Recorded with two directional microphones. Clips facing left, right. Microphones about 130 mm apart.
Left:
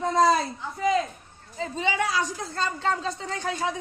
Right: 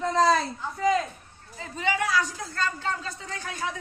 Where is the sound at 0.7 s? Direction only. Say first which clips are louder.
Even; 20° left (ahead or behind).